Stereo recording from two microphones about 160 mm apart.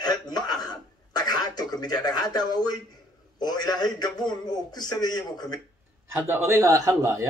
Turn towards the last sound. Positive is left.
turn(degrees=-20)  # may be behind; listen again after turning